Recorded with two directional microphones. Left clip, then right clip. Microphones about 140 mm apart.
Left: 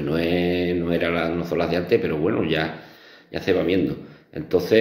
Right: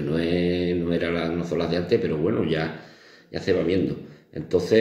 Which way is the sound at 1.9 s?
20° right (ahead or behind).